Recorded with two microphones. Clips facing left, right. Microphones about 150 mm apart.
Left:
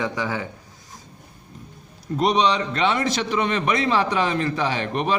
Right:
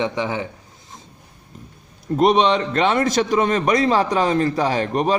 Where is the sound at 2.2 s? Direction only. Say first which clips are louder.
Right 4 dB; 50° right (ahead or behind).